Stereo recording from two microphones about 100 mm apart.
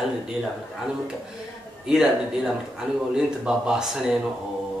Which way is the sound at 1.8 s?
5° right (ahead or behind).